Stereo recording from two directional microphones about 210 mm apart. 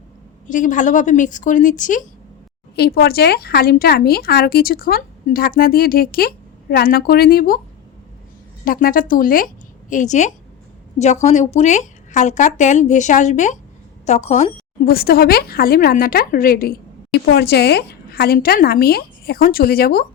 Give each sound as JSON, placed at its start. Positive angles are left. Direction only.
{"t": 0.4, "sound": "speech", "side_deg": 40}
{"t": 2.7, "sound": "a woman's voice", "side_deg": 50}
{"t": 8.6, "sound": "speech", "side_deg": 45}
{"t": 14.8, "sound": "a woman's voice", "side_deg": 45}